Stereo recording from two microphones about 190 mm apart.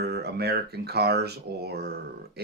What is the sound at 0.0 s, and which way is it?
Speech, 60° right (ahead or behind).